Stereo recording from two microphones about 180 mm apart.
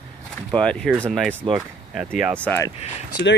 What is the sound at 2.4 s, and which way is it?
Speech, 10° left (ahead or behind).